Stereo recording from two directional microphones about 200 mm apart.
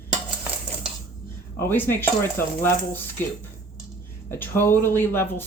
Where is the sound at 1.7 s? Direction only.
10° left (ahead or behind).